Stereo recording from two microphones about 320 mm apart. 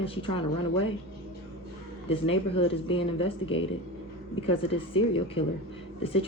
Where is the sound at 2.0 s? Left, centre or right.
Centre.